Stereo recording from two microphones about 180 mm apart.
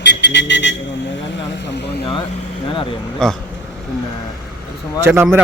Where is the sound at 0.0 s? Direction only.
75° left (ahead or behind).